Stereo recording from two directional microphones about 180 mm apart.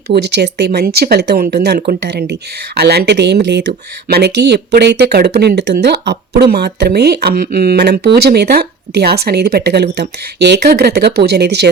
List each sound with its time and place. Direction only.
0.2 s speech: 70° right (ahead or behind)